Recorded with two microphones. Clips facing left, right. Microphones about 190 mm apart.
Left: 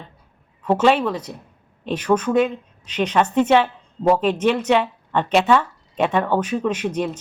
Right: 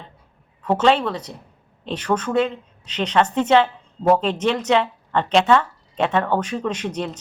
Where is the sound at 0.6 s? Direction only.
10° left (ahead or behind).